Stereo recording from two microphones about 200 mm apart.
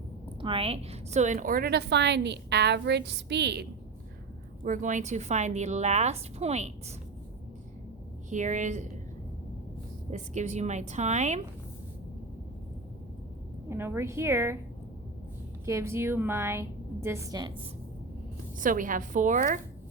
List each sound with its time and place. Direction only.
0.4 s a woman's voice: 30° right (ahead or behind); by 3.7 s 55° right (ahead or behind)
4.6 s a woman's voice: 40° right (ahead or behind)
8.3 s a woman's voice: 40° right (ahead or behind)
10.1 s a woman's voice: 35° right (ahead or behind)
13.7 s a woman's voice: 10° right (ahead or behind)
15.6 s a woman's voice: 15° right (ahead or behind)
18.6 s a woman's voice: 40° right (ahead or behind)